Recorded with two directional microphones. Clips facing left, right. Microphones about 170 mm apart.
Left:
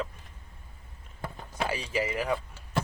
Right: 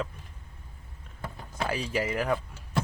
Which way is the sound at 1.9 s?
10° left (ahead or behind).